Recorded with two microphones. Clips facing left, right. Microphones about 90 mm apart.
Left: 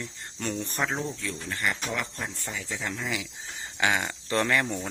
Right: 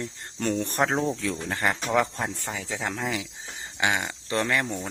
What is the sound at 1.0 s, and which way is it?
Speech, 90° right.